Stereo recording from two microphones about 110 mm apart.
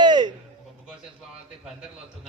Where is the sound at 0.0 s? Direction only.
40° right (ahead or behind).